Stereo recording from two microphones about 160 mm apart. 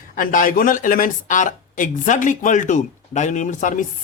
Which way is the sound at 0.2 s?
55° left (ahead or behind).